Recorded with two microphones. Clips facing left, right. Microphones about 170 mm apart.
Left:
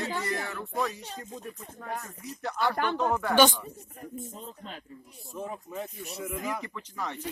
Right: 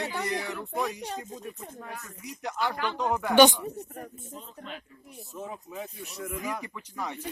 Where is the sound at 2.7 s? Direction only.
50° left (ahead or behind).